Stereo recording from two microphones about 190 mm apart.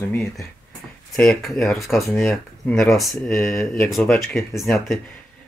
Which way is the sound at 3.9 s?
Centre (ahead or behind).